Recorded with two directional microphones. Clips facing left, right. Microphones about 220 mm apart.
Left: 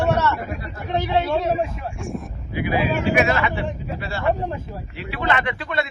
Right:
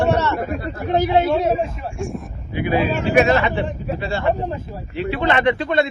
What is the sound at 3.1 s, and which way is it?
A man's voice, 35° right (ahead or behind).